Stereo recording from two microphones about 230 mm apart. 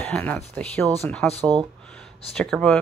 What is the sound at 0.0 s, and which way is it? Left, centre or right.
Speech, centre.